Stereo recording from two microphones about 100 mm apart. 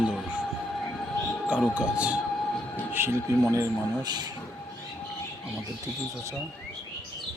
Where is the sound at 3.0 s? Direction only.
20° right (ahead or behind).